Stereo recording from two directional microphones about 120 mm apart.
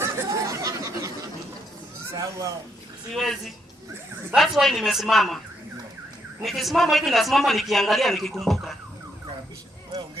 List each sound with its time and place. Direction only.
0.0 s chatter: 25° right (ahead or behind)
2.1 s a sound: 25° right (ahead or behind)
3.2 s a man's voice: centre (ahead or behind)
6.4 s a man's voice: centre (ahead or behind)